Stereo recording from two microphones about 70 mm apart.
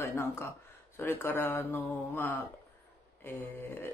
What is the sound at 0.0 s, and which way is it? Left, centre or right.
Speech, left.